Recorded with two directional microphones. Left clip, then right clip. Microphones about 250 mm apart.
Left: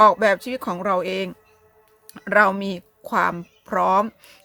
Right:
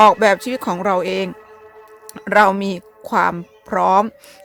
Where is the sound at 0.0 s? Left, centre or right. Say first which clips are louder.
Right 4 dB; right.